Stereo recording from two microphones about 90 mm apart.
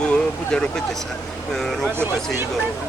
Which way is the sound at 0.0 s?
10° left (ahead or behind).